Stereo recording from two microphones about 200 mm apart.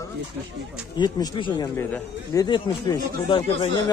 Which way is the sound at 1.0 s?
20° left (ahead or behind).